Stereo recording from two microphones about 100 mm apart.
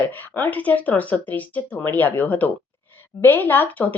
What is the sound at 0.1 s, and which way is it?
A woman's voice, 20° left (ahead or behind).